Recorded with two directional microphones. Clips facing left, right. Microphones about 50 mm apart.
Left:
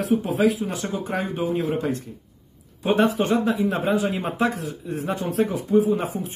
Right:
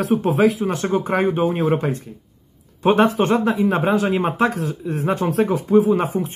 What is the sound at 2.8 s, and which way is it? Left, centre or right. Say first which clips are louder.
Speech: right 4 dB; right.